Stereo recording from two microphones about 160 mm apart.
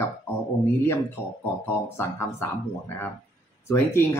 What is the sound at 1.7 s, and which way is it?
Speech, 15° left (ahead or behind).